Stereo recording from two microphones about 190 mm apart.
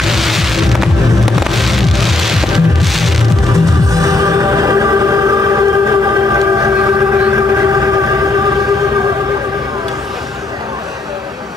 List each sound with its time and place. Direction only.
0.0 s music: centre (ahead or behind)
3.9 s music: 15° right (ahead or behind)